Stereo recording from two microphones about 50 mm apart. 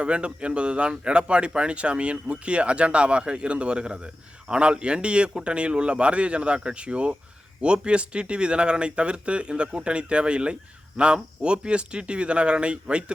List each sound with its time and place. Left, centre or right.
0.0 s speech: right